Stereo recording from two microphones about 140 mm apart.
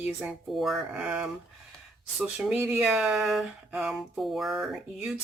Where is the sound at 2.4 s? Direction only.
10° right (ahead or behind).